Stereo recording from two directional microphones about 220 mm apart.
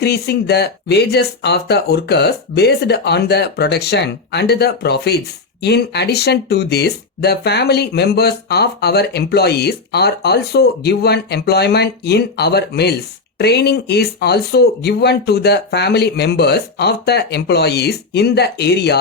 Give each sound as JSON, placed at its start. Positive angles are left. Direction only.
{"t": 0.0, "sound": "speech", "side_deg": 50}